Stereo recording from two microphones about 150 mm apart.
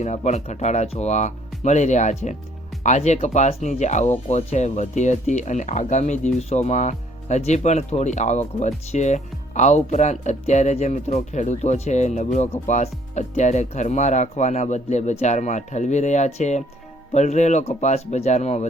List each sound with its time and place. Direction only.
0.0 s speech: 50° left (ahead or behind)